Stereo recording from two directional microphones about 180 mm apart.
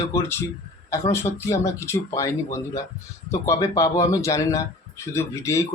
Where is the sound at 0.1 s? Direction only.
15° left (ahead or behind).